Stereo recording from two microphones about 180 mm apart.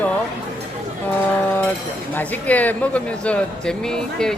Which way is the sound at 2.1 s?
10° left (ahead or behind).